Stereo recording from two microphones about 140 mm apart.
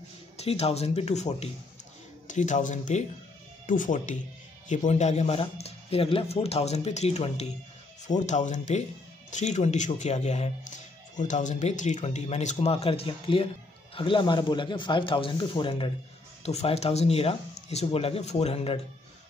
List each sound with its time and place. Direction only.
0.4 s speech: 45° left (ahead or behind)
3.6 s speech: 70° left (ahead or behind); by 7.4 s 50° left (ahead or behind)
8.1 s speech: 60° left (ahead or behind); by 15.9 s 35° left (ahead or behind)
16.4 s speech: 50° left (ahead or behind)